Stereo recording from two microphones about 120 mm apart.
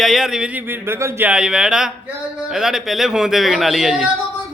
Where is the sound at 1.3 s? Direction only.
5° right (ahead or behind).